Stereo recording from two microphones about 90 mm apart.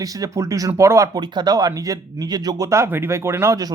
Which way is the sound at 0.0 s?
40° right (ahead or behind).